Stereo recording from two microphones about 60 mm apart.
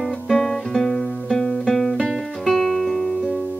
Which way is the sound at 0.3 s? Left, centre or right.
Centre.